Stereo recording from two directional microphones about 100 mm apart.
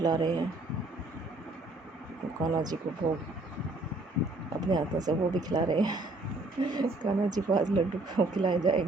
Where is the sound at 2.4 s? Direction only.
40° right (ahead or behind).